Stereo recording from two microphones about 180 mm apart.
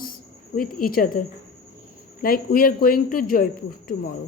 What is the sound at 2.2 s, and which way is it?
A woman's voice, 55° left (ahead or behind).